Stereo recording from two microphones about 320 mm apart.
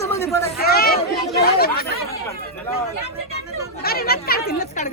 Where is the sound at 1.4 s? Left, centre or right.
Left.